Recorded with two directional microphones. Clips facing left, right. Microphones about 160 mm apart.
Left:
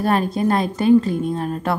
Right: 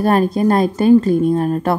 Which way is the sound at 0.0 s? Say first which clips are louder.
Right 4 dB; 45° right (ahead or behind).